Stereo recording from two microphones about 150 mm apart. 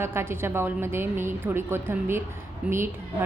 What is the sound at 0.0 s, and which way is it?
A woman's voice, 15° right (ahead or behind).